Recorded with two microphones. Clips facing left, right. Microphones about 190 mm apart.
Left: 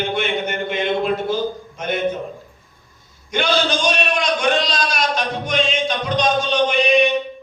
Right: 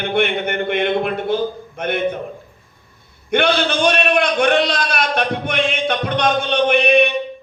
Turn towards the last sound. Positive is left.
turn(degrees=-60)  # may be behind; listen again after turning